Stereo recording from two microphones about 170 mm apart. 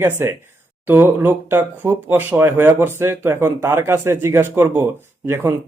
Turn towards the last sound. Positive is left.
turn(degrees=-15)  # may be behind; listen again after turning